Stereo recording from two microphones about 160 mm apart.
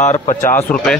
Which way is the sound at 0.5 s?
5° left (ahead or behind).